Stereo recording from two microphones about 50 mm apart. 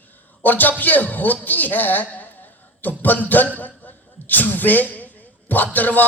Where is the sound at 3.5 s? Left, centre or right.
Left.